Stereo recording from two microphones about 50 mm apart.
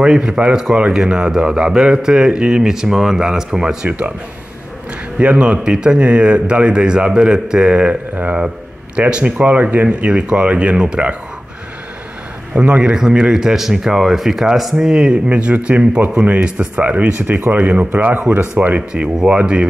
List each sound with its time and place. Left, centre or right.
0.0 s a man's voice: centre
5.2 s a man's voice: right
12.5 s a man's voice: right
12.9 s a man's voice: centre
17.2 s speech: right
17.5 s a man's voice: right